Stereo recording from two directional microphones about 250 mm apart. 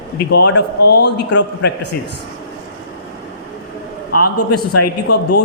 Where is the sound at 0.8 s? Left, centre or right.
Left.